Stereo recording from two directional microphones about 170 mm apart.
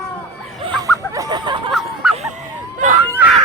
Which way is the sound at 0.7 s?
20° right (ahead or behind).